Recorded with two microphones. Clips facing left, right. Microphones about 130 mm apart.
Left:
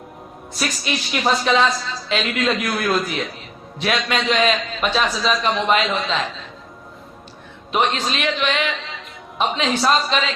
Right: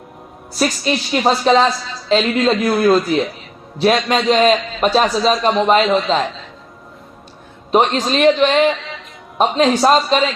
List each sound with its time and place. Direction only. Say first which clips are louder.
0.5 s a woman's voice: right 7 dB; 35° right (ahead or behind)
7.7 s a woman's voice: right 6 dB; 40° right (ahead or behind)